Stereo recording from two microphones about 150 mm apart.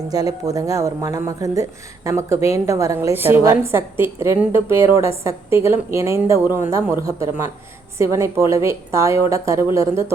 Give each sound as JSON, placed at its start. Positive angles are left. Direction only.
{"t": 0.1, "sound": "a woman's voice", "side_deg": -25}